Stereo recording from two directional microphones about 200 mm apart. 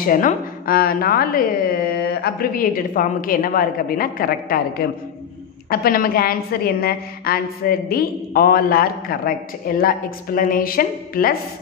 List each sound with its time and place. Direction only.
0.0 s a woman's voice: 45° left (ahead or behind)